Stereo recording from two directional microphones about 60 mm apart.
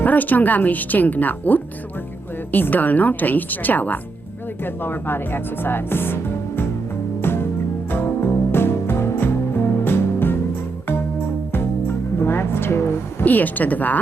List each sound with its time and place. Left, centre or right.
0.0 s speech: left
7.2 s music: left
11.5 s music: left
13.2 s speech: left